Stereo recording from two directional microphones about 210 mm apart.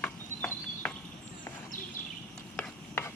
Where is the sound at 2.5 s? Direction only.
10° left (ahead or behind).